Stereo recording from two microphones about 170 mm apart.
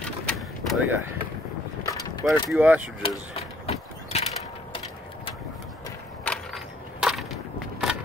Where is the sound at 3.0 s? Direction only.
35° left (ahead or behind).